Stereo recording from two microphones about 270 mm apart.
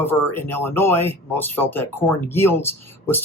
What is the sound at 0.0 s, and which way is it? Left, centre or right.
Speech, centre.